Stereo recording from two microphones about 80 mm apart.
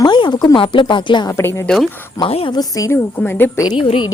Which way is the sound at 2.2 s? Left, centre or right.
Left.